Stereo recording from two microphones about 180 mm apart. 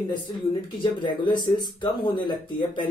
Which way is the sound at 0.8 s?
25° left (ahead or behind).